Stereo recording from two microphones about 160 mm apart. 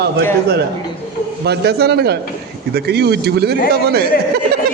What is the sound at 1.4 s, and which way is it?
Speech, 90° right.